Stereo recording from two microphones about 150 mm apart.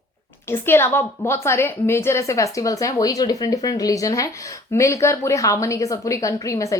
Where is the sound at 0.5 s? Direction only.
15° left (ahead or behind).